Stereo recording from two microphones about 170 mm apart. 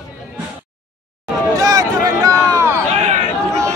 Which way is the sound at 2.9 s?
40° right (ahead or behind).